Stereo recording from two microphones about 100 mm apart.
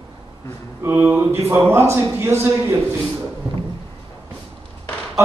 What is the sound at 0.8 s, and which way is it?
A man's voice, 25° right (ahead or behind).